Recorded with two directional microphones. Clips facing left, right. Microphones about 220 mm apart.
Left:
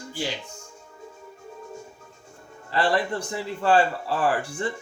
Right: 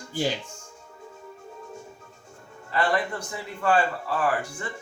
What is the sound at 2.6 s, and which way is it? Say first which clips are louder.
A man's voice: left 2 dB; 30° left (ahead or behind).